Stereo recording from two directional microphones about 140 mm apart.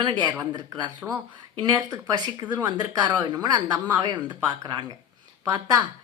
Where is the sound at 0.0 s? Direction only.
35° right (ahead or behind).